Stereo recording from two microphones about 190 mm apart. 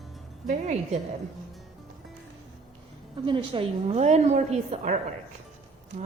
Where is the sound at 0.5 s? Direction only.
35° right (ahead or behind).